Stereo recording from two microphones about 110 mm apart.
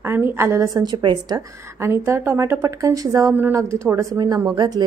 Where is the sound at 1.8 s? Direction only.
25° right (ahead or behind).